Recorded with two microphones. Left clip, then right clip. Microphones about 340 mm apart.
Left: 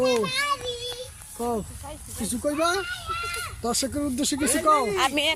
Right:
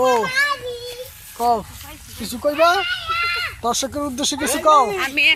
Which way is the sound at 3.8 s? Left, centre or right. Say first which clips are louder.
Right 5 dB; centre.